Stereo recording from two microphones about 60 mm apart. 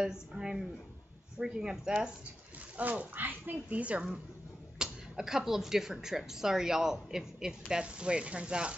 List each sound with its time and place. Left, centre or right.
0.0 s speech: centre
2.8 s speech: right
3.6 s speech: right
4.7 s speech: centre